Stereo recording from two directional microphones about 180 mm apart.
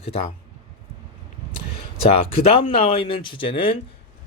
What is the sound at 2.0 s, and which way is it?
Speech, 30° left (ahead or behind).